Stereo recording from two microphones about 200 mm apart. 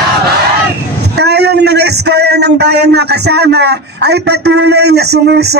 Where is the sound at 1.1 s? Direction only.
55° right (ahead or behind).